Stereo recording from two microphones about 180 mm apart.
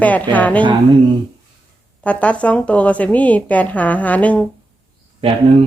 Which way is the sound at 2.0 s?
5° left (ahead or behind).